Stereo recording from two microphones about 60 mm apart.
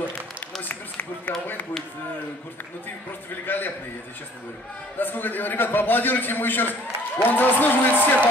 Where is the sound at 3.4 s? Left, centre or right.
Left.